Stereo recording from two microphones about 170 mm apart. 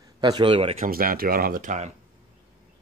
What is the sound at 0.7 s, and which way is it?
Speech, 60° right (ahead or behind).